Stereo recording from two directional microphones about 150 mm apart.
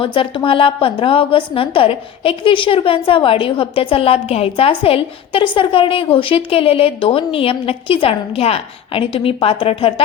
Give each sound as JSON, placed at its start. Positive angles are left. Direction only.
{"t": 0.0, "sound": "a woman's voice", "side_deg": 35}